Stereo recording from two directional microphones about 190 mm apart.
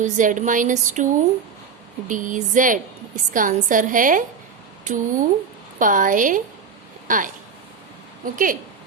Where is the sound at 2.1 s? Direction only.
45° right (ahead or behind).